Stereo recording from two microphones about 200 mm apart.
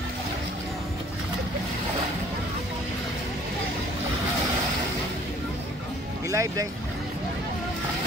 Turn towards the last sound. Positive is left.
turn(degrees=-15)  # may be behind; listen again after turning